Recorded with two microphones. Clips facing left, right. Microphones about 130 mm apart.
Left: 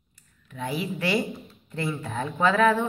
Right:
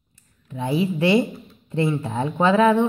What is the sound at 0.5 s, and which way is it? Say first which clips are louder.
Speech: right 8 dB; 25° right (ahead or behind).